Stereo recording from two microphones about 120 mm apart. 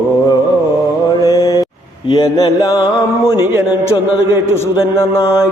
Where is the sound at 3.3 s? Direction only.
20° right (ahead or behind).